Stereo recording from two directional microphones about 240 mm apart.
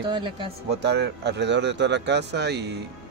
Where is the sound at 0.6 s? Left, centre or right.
Right.